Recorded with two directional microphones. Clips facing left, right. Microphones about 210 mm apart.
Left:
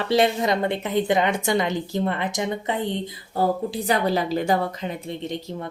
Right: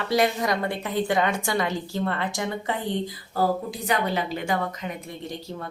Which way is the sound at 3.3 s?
30° left (ahead or behind).